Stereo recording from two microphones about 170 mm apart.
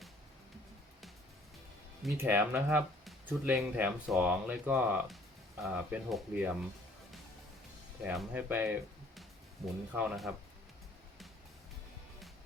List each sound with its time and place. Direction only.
2.1 s speech: 10° right (ahead or behind)
8.0 s speech: 5° right (ahead or behind)
9.9 s speech: 10° right (ahead or behind)